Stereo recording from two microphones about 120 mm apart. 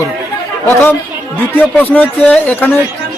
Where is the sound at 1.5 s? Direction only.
15° left (ahead or behind).